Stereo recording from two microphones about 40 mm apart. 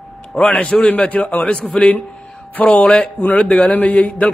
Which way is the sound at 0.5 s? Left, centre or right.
Left.